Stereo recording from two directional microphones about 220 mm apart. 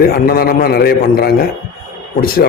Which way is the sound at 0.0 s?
45° left (ahead or behind).